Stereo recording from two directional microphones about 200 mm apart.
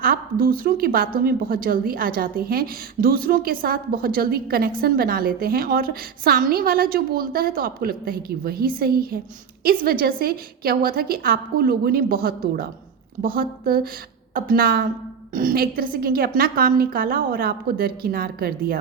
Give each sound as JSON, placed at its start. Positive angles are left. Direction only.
{"t": 0.0, "sound": "a woman's voice", "side_deg": -45}